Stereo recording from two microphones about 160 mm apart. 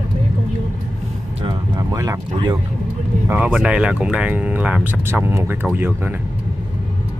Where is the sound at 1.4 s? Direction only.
20° right (ahead or behind).